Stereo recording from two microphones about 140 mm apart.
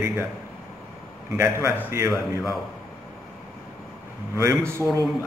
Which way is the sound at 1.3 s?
20° right (ahead or behind).